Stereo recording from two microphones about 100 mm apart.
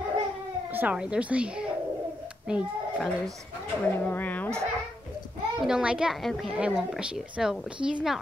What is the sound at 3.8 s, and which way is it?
Speech, 20° left (ahead or behind).